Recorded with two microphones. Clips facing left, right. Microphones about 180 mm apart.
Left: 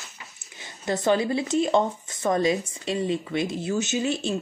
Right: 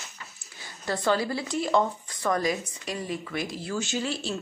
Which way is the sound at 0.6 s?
20° left (ahead or behind).